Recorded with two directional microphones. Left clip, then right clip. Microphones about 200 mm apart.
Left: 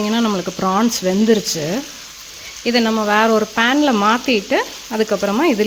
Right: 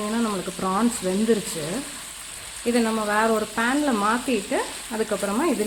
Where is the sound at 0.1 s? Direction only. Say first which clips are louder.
Left 7 dB; 45° left (ahead or behind).